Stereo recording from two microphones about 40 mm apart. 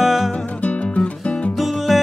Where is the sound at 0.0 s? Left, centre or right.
Centre.